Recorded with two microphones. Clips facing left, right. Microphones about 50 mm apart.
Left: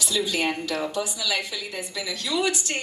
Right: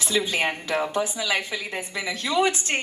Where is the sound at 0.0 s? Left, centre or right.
Right.